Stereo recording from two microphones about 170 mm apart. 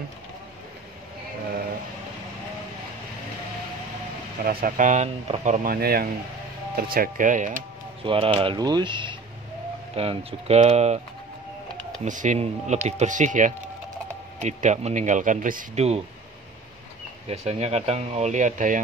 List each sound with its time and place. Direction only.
4.5 s speech: 55° right (ahead or behind)
8.0 s speech: 30° right (ahead or behind)
12.0 s speech: 50° right (ahead or behind)
17.3 s speech: 35° right (ahead or behind)